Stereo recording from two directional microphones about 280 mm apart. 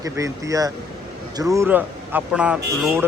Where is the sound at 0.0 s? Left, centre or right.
Centre.